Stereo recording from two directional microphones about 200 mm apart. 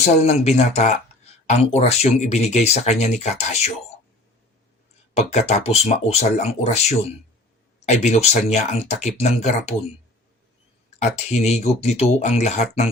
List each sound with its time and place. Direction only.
0.0 s speech: 35° left (ahead or behind)
5.1 s speech: 35° left (ahead or behind)
11.0 s speech: 35° left (ahead or behind)